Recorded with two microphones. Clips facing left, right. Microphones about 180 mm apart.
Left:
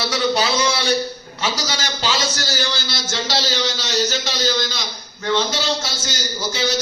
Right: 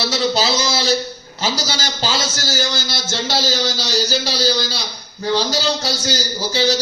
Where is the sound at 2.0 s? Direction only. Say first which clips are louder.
Left 1 dB; 45° right (ahead or behind).